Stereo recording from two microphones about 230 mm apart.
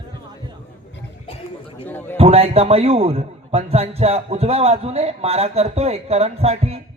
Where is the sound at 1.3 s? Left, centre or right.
Left.